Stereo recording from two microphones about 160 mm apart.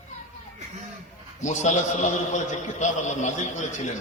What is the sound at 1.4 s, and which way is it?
A man's voice, 50° left (ahead or behind).